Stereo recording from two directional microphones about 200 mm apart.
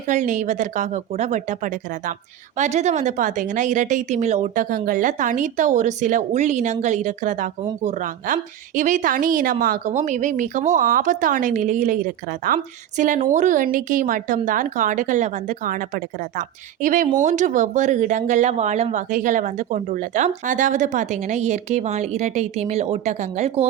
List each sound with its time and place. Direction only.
0.1 s speech: 40° right (ahead or behind)